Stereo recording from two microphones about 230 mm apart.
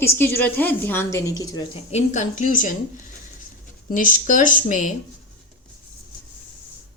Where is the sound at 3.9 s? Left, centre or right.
Left.